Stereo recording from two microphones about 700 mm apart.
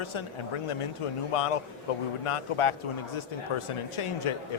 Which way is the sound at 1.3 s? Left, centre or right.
Left.